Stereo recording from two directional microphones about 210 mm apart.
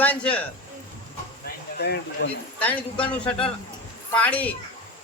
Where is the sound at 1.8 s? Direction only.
50° left (ahead or behind).